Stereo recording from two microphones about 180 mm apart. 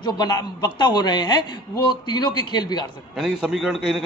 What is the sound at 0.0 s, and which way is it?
A man's voice, 20° left (ahead or behind).